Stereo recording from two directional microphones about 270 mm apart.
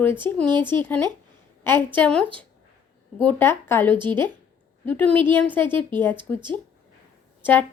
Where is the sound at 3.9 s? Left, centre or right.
Centre.